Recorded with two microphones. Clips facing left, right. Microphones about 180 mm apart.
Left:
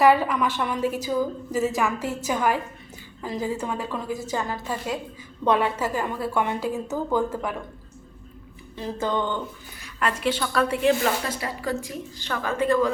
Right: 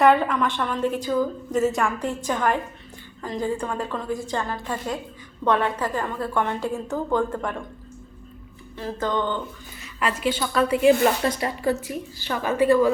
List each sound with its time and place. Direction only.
0.0 s a woman's voice: 5° left (ahead or behind)
8.7 s a woman's voice: 15° left (ahead or behind)
9.7 s a woman's voice: centre (ahead or behind)
11.2 s a woman's voice: 30° right (ahead or behind)
11.9 s a woman's voice: 10° right (ahead or behind)